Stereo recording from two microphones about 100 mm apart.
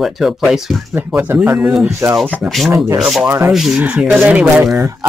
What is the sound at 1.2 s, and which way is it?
Speech, 15° right (ahead or behind).